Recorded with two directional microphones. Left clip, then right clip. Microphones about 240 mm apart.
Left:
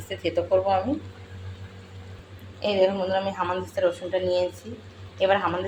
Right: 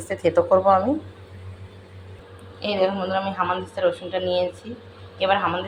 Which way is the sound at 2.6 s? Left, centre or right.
Centre.